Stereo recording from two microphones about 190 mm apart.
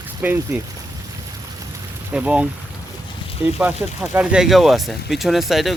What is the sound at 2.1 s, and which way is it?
Speech, 5° right (ahead or behind).